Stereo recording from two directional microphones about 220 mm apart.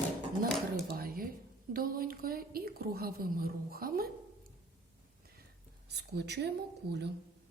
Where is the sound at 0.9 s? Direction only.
40° right (ahead or behind).